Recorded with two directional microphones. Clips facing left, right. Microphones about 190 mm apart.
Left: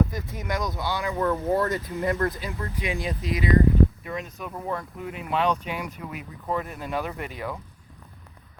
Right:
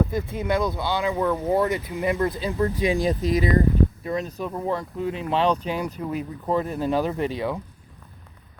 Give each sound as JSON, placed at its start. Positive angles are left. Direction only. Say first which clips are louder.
{"t": 0.1, "sound": "speech", "louder": "right 7 dB", "side_deg": -25}
{"t": 2.3, "sound": "speech", "louder": "right 9 dB", "side_deg": -30}